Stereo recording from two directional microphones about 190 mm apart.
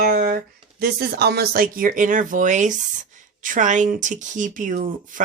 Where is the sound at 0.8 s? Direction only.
55° right (ahead or behind).